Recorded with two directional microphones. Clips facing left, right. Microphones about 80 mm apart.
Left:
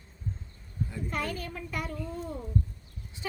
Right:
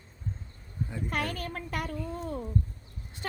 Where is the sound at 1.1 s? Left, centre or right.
Right.